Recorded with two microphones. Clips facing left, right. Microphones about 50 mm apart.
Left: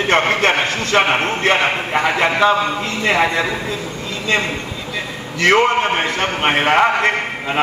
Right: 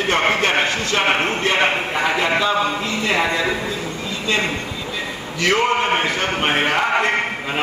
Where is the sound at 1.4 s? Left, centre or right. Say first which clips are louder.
Left 2 dB; left.